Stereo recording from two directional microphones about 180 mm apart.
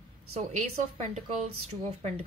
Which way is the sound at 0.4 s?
40° right (ahead or behind).